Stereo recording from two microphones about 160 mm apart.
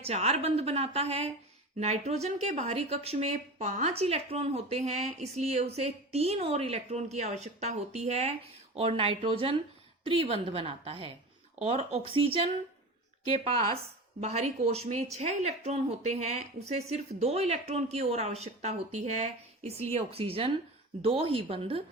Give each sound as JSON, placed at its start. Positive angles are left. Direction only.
{"t": 0.0, "sound": "a woman's voice", "side_deg": -40}